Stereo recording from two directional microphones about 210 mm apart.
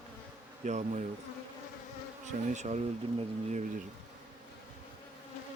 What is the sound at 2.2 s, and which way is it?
Speech, 35° right (ahead or behind).